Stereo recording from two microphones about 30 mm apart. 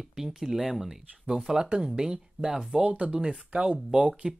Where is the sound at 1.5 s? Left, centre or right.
Right.